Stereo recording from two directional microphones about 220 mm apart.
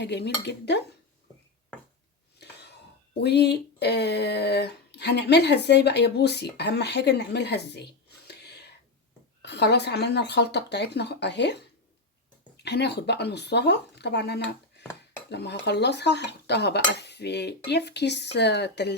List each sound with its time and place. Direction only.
0.0 s speech: 50° left (ahead or behind)
3.2 s speech: 50° left (ahead or behind)
8.3 s whispering: 50° left (ahead or behind)
9.4 s speech: 50° left (ahead or behind)
12.5 s speech: 50° left (ahead or behind)